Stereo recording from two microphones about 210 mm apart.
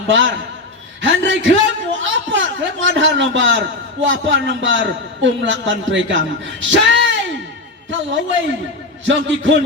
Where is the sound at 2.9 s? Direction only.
65° right (ahead or behind).